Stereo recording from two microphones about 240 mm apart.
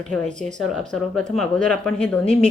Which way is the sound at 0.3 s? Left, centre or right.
Right.